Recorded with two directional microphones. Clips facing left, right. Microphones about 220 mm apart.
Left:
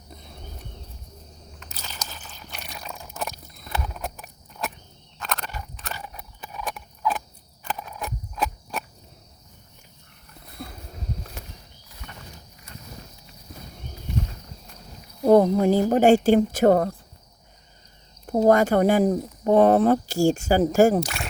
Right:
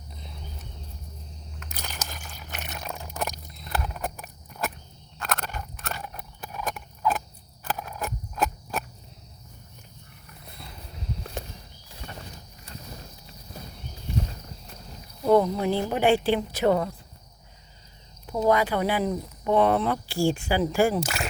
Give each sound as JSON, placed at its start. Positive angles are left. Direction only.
{"t": 1.8, "sound": "a sound", "side_deg": -15}
{"t": 3.7, "sound": "horse", "side_deg": 0}
{"t": 5.2, "sound": "a sound", "side_deg": 0}
{"t": 7.6, "sound": "cricket", "side_deg": -5}
{"t": 10.6, "sound": "a sound", "side_deg": 50}
{"t": 11.9, "sound": "horse", "side_deg": -30}
{"t": 15.2, "sound": "speech", "side_deg": 40}
{"t": 18.3, "sound": "speech", "side_deg": 45}
{"t": 21.0, "sound": "speech", "side_deg": 0}